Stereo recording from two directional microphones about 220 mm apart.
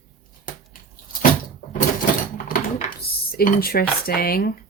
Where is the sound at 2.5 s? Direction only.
40° left (ahead or behind).